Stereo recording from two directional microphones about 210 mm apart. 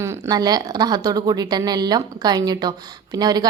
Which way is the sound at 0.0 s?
15° right (ahead or behind).